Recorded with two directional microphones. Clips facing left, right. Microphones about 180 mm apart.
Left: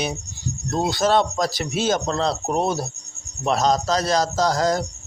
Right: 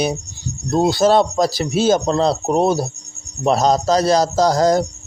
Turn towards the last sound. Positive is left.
turn(degrees=-35)  # may be behind; listen again after turning